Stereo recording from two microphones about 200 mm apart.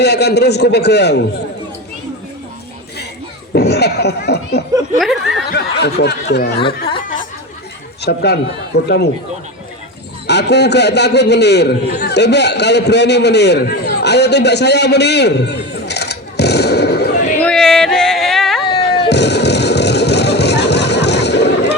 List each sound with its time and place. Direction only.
0.0 s a man's voice: 55° left (ahead or behind)
3.5 s a child's voice: 55° left (ahead or behind)
4.9 s speech: centre (ahead or behind)
5.5 s a man's voice: 55° left (ahead or behind)
6.6 s speech: 25° left (ahead or behind)
8.0 s a man's voice: 55° left (ahead or behind)
10.2 s a man's voice: 55° left (ahead or behind)
17.4 s yodeling: 5° left (ahead or behind)
19.0 s music: 60° left (ahead or behind)